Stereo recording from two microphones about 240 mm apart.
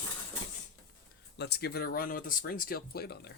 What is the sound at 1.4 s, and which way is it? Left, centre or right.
Speech, left.